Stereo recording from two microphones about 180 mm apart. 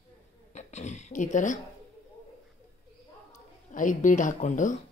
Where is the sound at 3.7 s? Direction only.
45° left (ahead or behind).